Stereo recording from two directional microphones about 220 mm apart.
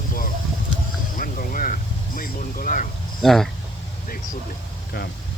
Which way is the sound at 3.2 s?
Centre (ahead or behind).